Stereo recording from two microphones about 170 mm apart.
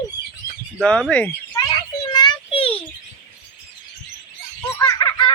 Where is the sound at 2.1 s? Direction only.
25° left (ahead or behind).